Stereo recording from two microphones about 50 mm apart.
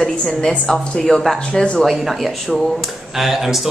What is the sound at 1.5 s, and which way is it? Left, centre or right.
Speech, centre.